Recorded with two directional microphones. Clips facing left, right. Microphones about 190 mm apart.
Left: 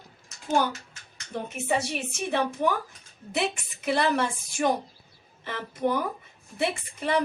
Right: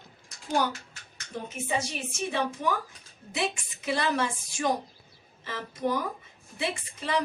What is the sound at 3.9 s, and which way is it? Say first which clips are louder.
A woman's voice: left 3 dB; 60° left (ahead or behind).